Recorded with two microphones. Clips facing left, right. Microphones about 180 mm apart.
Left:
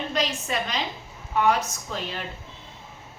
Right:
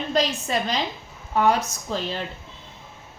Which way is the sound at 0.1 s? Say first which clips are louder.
Right 7 dB; 35° right (ahead or behind).